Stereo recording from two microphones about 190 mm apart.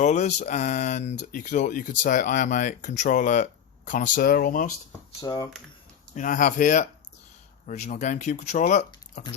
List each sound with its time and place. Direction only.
0.0 s speech: 40° left (ahead or behind)
5.2 s speech: 20° left (ahead or behind)
6.1 s speech: 45° left (ahead or behind)